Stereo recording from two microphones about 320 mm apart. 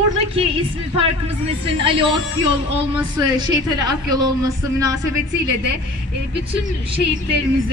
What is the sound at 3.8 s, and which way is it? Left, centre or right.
Speech, centre.